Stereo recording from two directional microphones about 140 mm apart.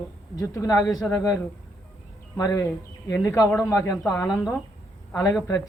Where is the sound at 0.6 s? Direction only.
25° left (ahead or behind).